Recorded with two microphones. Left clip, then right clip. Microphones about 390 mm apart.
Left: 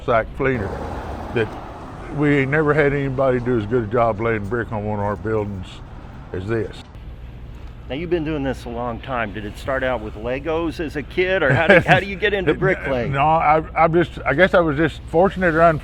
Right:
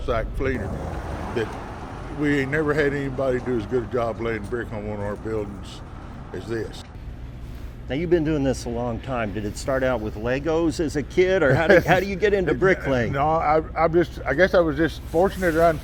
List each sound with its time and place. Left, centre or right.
0.0 s speech: left
2.2 s a man's voice: left
7.9 s speech: centre
13.1 s a man's voice: left